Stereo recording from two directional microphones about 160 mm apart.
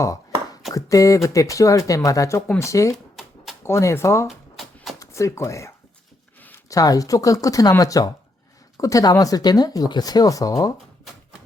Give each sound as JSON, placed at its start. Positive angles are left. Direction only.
{"t": 0.0, "sound": "chopping", "side_deg": 20}
{"t": 0.7, "sound": "speech", "side_deg": 20}
{"t": 4.3, "sound": "a sound", "side_deg": 0}
{"t": 4.9, "sound": "speech", "side_deg": 20}